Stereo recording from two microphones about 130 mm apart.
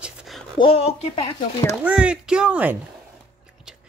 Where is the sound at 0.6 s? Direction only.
50° left (ahead or behind).